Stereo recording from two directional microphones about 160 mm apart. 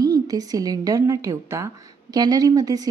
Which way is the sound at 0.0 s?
25° right (ahead or behind).